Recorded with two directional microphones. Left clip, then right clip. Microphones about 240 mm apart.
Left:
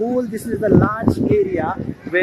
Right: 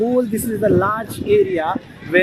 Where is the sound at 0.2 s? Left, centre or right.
Right.